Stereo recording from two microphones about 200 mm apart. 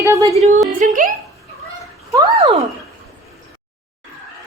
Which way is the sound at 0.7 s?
40° right (ahead or behind).